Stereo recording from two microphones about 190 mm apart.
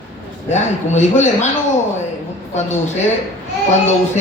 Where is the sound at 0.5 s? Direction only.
35° left (ahead or behind).